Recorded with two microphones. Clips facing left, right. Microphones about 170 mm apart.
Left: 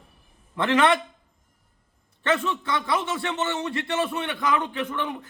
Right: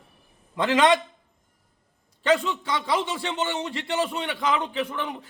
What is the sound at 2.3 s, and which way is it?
A man's voice, 15° right (ahead or behind).